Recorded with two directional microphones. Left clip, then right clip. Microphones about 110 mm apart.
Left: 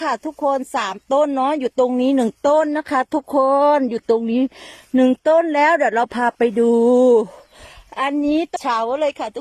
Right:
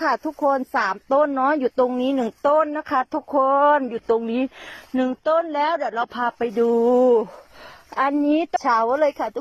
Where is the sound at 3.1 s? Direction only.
40° left (ahead or behind).